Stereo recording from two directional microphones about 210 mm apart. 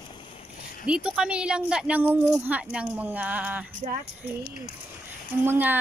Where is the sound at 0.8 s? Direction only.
5° right (ahead or behind).